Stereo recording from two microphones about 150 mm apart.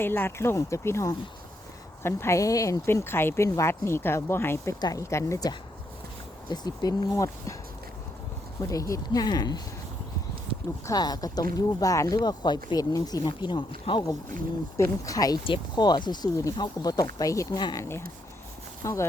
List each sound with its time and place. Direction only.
0.0 s speech: 15° left (ahead or behind)
8.6 s speech: 20° left (ahead or behind)
10.8 s speech: 25° left (ahead or behind)